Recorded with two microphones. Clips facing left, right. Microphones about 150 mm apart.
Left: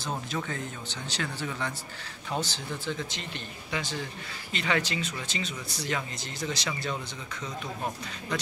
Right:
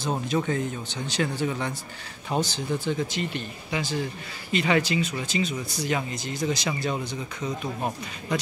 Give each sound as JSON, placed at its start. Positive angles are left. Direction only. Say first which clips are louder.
{"t": 0.4, "sound": "speech", "louder": "right 8 dB", "side_deg": -20}